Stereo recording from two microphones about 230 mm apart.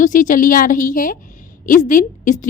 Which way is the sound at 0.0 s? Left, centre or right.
Left.